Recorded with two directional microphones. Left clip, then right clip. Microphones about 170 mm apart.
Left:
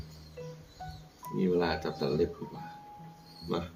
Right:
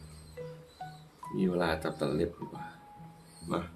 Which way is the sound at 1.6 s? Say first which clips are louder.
Right 3 dB; 50° right (ahead or behind).